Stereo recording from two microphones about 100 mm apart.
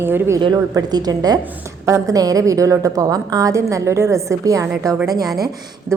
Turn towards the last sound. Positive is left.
turn(degrees=-40)  # may be behind; listen again after turning